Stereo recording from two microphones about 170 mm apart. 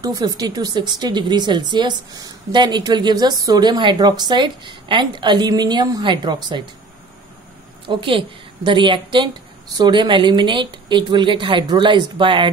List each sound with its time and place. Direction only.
0.0 s speech: 20° right (ahead or behind)
7.8 s speech: 30° right (ahead or behind)